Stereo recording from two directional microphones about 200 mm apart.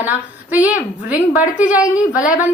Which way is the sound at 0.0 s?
5° right (ahead or behind).